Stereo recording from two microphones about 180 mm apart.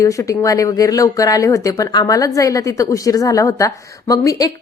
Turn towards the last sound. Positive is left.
turn(degrees=20)  # may be behind; listen again after turning